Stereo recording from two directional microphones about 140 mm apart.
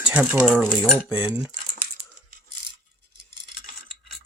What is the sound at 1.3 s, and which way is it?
Speech, 20° right (ahead or behind).